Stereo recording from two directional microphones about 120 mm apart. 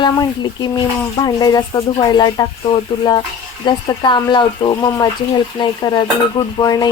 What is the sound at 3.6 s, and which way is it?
Speech, 40° left (ahead or behind).